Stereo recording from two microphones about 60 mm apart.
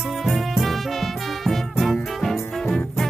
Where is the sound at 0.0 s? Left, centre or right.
Centre.